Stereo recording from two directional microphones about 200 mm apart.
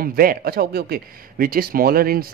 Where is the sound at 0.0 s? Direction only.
45° right (ahead or behind).